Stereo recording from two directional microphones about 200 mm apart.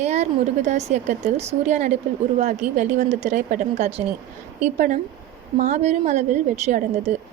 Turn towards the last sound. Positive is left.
turn(degrees=-35)  # may be behind; listen again after turning